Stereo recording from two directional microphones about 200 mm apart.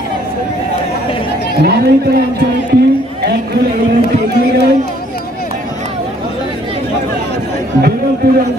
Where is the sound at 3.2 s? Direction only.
55° right (ahead or behind).